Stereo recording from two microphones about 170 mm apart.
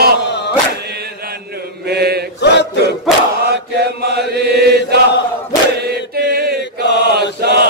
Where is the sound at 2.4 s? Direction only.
85° left.